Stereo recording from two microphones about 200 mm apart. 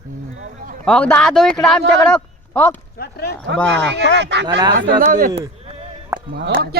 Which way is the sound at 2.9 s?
50° left (ahead or behind).